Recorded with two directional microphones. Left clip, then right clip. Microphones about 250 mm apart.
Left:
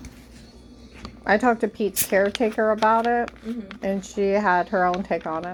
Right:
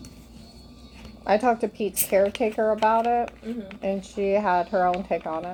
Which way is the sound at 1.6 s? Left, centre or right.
Centre.